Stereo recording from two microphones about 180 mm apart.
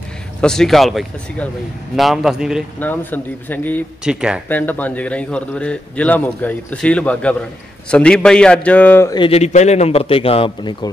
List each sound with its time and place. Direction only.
0.4 s a man's voice: 5° left (ahead or behind)
2.8 s a man's voice: 10° left (ahead or behind)
4.0 s a man's voice: 5° right (ahead or behind)
4.5 s a man's voice: 10° left (ahead or behind)
9.1 s a man's voice: 30° left (ahead or behind)